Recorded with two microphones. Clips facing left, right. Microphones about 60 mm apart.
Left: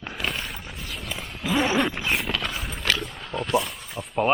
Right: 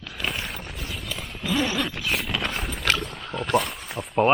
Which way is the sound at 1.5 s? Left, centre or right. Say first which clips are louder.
Left 3 dB; centre.